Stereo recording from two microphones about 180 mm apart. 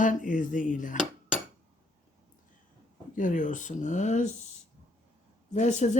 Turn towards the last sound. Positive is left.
turn(degrees=40)  # may be behind; listen again after turning